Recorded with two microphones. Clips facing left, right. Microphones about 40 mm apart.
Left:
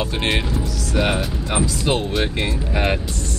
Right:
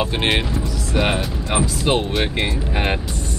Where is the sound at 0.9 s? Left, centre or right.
Centre.